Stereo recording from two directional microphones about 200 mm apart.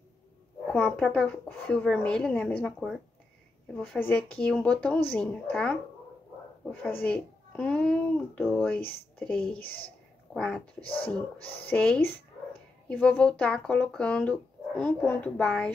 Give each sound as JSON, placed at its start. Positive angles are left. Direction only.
{"t": 0.7, "sound": "speech", "side_deg": 5}
{"t": 10.3, "sound": "speech", "side_deg": 5}
{"t": 10.8, "sound": "speech", "side_deg": 25}
{"t": 11.6, "sound": "speech", "side_deg": 5}